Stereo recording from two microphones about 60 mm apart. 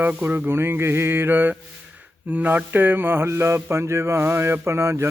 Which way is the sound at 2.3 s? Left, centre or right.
Right.